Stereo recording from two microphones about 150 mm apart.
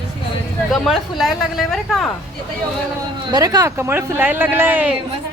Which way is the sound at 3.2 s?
25° right (ahead or behind).